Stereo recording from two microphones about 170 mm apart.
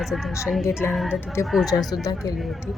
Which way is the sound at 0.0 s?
Centre (ahead or behind).